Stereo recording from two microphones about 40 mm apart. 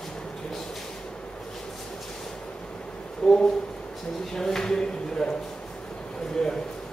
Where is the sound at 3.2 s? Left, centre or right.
Centre.